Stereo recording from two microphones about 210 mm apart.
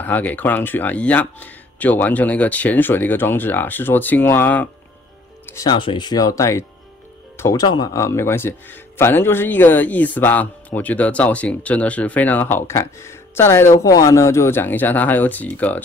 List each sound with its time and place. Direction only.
0.0 s speech: 10° left (ahead or behind)